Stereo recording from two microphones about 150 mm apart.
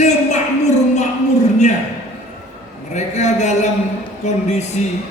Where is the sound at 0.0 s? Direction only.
50° left (ahead or behind).